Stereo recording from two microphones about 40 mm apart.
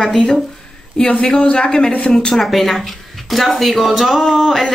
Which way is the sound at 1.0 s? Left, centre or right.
Centre.